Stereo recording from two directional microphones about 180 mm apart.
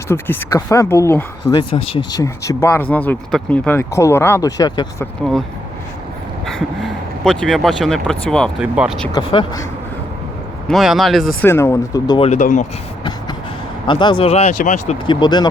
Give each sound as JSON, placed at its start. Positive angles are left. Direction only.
{"t": 0.1, "sound": "speech", "side_deg": 10}
{"t": 6.4, "sound": "speech", "side_deg": 0}
{"t": 9.1, "sound": "speech", "side_deg": 25}
{"t": 10.7, "sound": "speech", "side_deg": 0}
{"t": 11.4, "sound": "speech", "side_deg": 15}
{"t": 12.3, "sound": "speech", "side_deg": 45}
{"t": 13.8, "sound": "speech", "side_deg": 25}
{"t": 15.0, "sound": "speech", "side_deg": 25}